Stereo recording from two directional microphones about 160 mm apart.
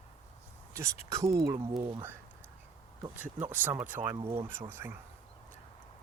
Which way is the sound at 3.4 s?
10° right (ahead or behind).